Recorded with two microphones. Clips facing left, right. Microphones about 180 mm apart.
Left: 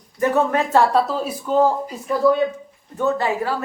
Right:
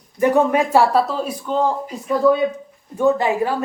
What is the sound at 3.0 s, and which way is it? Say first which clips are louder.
Speech: right 4 dB; 15° right (ahead or behind).